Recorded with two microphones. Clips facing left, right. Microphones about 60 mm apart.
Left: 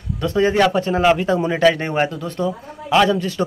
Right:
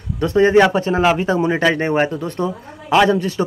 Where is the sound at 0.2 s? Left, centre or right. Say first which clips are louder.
Right 4 dB; right.